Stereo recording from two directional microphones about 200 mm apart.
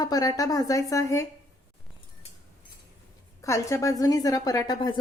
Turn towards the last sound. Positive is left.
turn(degrees=20)  # may be behind; listen again after turning